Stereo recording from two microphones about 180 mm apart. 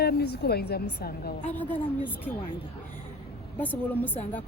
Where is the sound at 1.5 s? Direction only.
10° left (ahead or behind).